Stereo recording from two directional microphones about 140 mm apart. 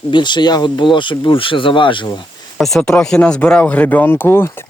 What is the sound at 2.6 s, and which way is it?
Speech, 5° left (ahead or behind).